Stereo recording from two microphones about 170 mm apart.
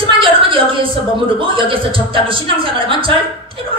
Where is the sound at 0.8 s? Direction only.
30° right (ahead or behind).